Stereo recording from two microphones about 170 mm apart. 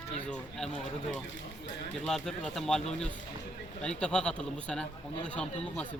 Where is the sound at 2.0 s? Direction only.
5° left (ahead or behind).